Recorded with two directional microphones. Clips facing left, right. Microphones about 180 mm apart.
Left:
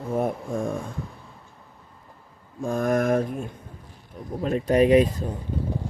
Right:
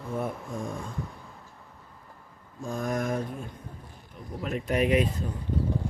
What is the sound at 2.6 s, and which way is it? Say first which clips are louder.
Mantra: left 7 dB; 55° left (ahead or behind).